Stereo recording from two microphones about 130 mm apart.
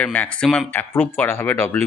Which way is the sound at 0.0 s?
10° left (ahead or behind).